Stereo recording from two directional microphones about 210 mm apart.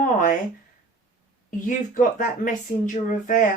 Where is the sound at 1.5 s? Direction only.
35° left (ahead or behind).